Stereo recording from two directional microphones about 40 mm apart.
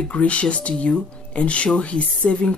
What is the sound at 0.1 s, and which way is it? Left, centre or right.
Speech, left.